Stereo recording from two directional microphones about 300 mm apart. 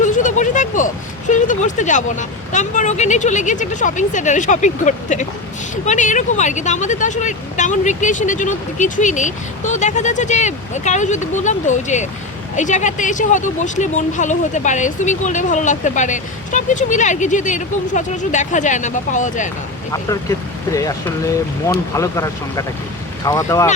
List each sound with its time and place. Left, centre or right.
0.0 s a sound: left
1.3 s speech: left
21.9 s speech: centre